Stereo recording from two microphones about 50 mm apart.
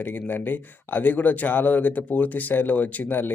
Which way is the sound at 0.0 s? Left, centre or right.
Left.